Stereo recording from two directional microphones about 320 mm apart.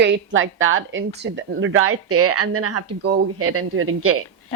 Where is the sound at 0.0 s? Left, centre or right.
Right.